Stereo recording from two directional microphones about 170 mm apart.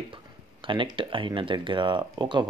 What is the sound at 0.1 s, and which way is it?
Speech, 30° right (ahead or behind).